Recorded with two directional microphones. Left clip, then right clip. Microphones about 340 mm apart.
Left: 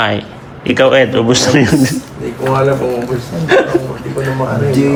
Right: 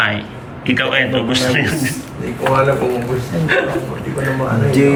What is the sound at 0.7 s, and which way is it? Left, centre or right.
Speech, centre.